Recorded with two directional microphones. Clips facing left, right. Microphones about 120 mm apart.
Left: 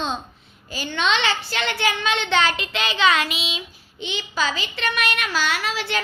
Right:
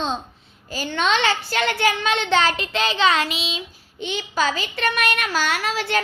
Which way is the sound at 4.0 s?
50° right (ahead or behind).